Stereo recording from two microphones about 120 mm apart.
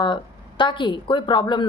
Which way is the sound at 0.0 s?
40° left (ahead or behind).